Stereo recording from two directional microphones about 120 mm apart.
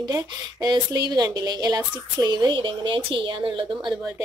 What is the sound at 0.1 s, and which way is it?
Speech, 35° right (ahead or behind).